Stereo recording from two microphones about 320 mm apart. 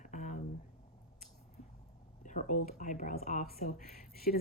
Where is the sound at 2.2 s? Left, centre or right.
Left.